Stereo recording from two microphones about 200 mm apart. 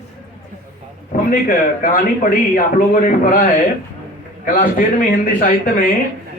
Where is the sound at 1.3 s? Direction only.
45° left (ahead or behind).